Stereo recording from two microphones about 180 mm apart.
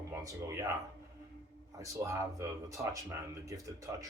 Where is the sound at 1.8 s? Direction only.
15° right (ahead or behind).